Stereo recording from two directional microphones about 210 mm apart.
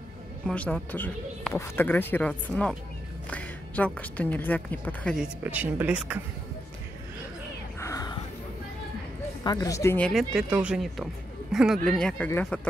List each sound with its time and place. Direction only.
0.5 s speech: 5° left (ahead or behind)
5.4 s speech: 10° right (ahead or behind)
7.8 s a sound: 15° left (ahead or behind)
9.4 s speech: 20° left (ahead or behind)